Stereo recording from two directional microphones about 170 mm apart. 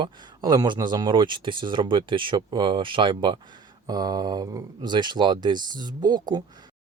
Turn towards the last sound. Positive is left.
turn(degrees=-25)  # may be behind; listen again after turning